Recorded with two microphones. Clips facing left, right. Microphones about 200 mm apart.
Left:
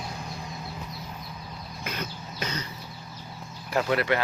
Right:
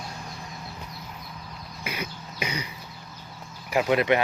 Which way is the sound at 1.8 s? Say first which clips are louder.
Right 1 dB; 10° right (ahead or behind).